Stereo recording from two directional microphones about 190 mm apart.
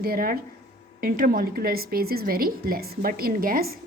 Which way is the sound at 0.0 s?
50° right (ahead or behind).